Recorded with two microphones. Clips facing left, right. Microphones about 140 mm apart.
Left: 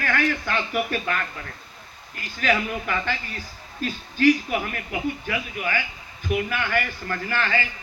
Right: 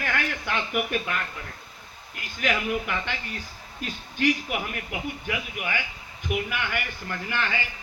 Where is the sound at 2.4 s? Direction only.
15° right (ahead or behind).